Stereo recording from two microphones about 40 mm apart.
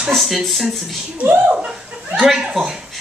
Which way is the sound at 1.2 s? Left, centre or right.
Right.